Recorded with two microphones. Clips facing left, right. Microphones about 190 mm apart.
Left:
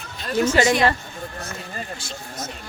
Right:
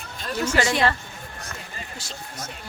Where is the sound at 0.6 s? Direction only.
15° left (ahead or behind).